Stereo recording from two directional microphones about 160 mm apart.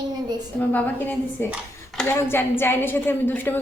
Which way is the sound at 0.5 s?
10° left (ahead or behind).